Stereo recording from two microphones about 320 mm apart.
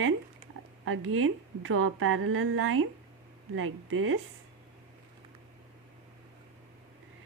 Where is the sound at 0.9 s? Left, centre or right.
Right.